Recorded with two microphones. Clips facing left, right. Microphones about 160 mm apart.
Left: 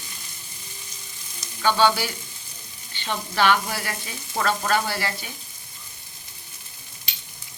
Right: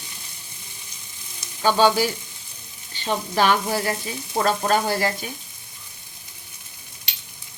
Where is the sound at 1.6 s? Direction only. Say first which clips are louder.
Right 3 dB; 40° right (ahead or behind).